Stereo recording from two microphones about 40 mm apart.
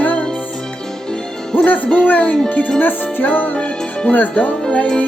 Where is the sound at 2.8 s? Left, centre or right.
Left.